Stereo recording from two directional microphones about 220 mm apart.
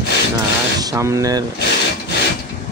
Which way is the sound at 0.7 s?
15° right (ahead or behind).